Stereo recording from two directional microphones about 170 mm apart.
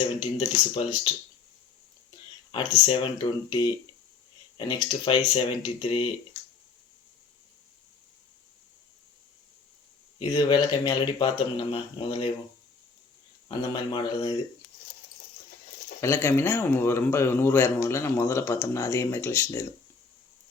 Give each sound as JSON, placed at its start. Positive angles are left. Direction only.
{"t": 0.2, "sound": "speech", "side_deg": 35}
{"t": 2.5, "sound": "speech", "side_deg": 30}
{"t": 10.2, "sound": "speech", "side_deg": 25}
{"t": 13.5, "sound": "speech", "side_deg": 25}
{"t": 16.0, "sound": "speech", "side_deg": 15}